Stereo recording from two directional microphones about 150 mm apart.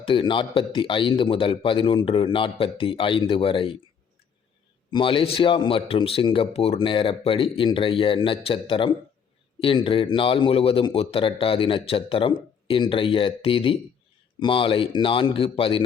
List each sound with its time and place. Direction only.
0.0 s a man's voice: 35° left (ahead or behind)
4.9 s a man's voice: 35° left (ahead or behind)